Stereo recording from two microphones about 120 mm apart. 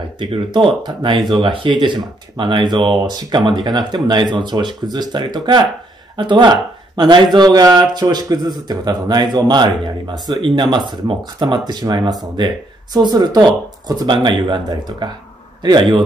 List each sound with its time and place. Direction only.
0.2 s speech: 45° right (ahead or behind)